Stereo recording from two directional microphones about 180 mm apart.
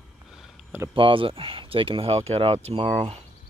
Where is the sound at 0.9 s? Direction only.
30° right (ahead or behind).